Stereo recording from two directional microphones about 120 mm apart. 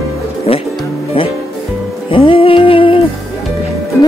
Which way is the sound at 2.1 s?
50° left (ahead or behind).